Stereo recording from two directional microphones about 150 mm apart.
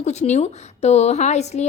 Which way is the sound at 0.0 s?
50° left (ahead or behind).